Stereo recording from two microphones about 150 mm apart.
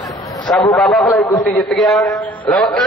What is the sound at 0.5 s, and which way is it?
Speech, 15° left (ahead or behind).